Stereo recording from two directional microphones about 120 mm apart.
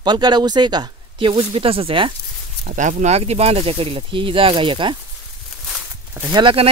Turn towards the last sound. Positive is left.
turn(degrees=-40)  # may be behind; listen again after turning